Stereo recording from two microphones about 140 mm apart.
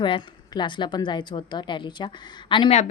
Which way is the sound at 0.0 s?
35° left (ahead or behind).